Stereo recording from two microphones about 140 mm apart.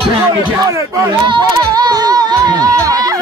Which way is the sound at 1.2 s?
30° right (ahead or behind).